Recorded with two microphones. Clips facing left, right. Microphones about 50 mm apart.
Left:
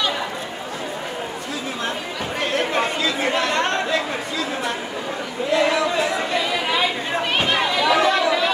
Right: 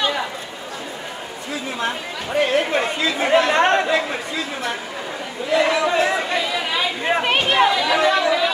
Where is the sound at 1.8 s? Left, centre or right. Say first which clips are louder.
Right 1 dB; centre.